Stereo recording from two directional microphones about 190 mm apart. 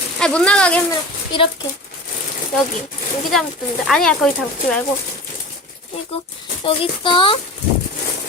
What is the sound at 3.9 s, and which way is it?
Speech, centre (ahead or behind).